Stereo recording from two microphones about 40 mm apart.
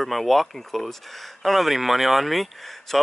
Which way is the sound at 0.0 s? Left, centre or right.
Centre.